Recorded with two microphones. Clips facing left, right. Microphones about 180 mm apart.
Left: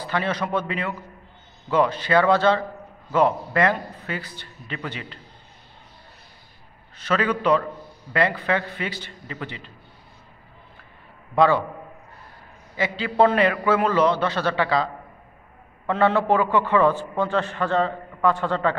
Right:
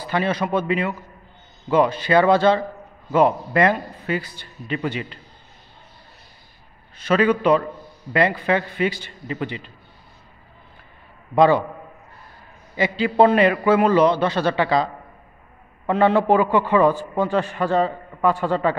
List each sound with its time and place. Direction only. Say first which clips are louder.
0.0 s a man's voice: right 3 dB; 10° right (ahead or behind)
7.1 s a man's voice: right 4 dB; 15° right (ahead or behind)
11.3 s a man's voice: right 3 dB; 15° right (ahead or behind)
12.7 s a man's voice: right 4 dB; 15° right (ahead or behind)
15.9 s a man's voice: right 3 dB; 15° right (ahead or behind)